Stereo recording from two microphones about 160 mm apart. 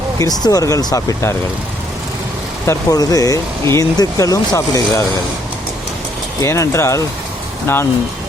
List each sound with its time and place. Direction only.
0.2 s speech: 25° left (ahead or behind)
2.6 s speech: 25° left (ahead or behind)
6.4 s speech: 20° left (ahead or behind)